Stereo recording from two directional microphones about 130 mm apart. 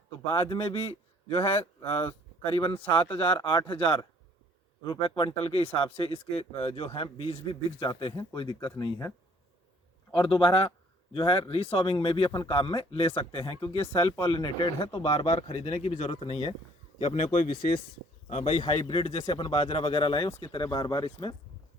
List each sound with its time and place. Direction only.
0.3 s speech: 40° left (ahead or behind)
10.1 s speech: 40° left (ahead or behind)
15.0 s speech: 55° left (ahead or behind)
17.0 s a man's voice: 60° left (ahead or behind)
18.9 s speech: 50° left (ahead or behind)